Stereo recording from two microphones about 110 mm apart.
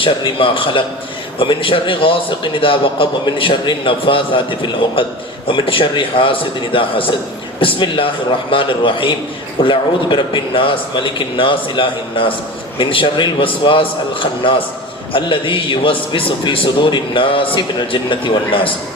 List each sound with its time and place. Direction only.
0.0 s a man's voice: 50° left (ahead or behind)